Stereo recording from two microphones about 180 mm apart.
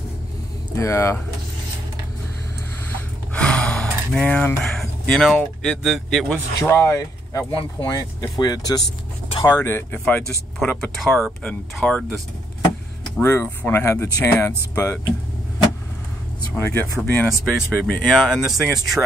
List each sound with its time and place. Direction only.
0.7 s speech: 15° left (ahead or behind)
3.3 s speech: 5° left (ahead or behind); by 8.8 s 20° left (ahead or behind)
9.4 s speech: 10° left (ahead or behind)
13.2 s speech: 10° left (ahead or behind)
16.5 s speech: 15° left (ahead or behind)
17.3 s speech: centre (ahead or behind)